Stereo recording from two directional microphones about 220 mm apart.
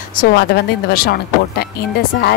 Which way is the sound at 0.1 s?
45° left (ahead or behind).